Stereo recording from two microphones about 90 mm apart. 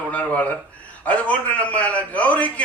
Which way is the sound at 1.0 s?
15° left (ahead or behind).